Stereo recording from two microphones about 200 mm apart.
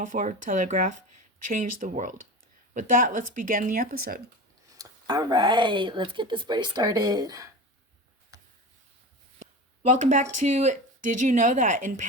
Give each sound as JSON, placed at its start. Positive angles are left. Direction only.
{"t": 0.0, "sound": "speech", "side_deg": -40}
{"t": 4.8, "sound": "speech", "side_deg": -20}
{"t": 9.4, "sound": "a sound", "side_deg": -35}
{"t": 10.3, "sound": "speech", "side_deg": -35}